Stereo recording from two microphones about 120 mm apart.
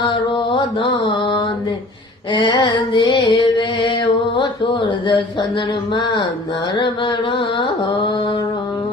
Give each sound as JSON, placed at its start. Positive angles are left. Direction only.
{"t": 0.5, "sound": "mantra", "side_deg": 45}
{"t": 2.3, "sound": "speech", "side_deg": 40}
{"t": 6.7, "sound": "mantra", "side_deg": 40}